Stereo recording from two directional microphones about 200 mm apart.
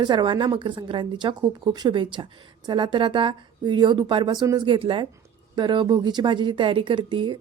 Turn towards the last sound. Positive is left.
turn(degrees=-25)  # may be behind; listen again after turning